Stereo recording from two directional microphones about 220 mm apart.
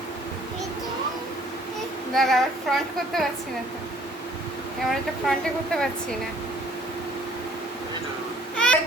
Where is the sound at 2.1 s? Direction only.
Centre (ahead or behind).